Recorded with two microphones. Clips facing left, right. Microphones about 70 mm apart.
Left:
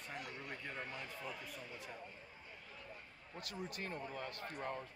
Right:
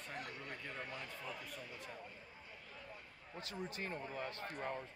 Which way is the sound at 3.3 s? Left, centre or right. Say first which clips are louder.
Right 1 dB; right.